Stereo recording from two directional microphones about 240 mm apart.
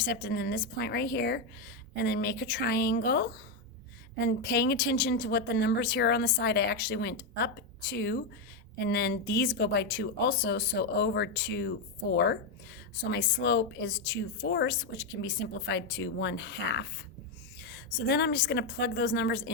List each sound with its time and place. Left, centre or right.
0.0 s a woman's voice: left